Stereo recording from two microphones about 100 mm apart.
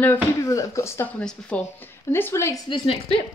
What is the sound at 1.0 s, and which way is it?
Speech, 15° left (ahead or behind).